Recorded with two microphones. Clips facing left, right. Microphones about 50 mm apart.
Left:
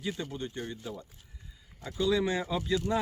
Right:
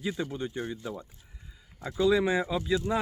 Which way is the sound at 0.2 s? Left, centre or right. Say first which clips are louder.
Right 4 dB; centre.